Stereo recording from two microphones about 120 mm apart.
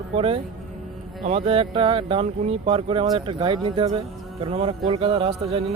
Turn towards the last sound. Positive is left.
turn(degrees=-55)  # may be behind; listen again after turning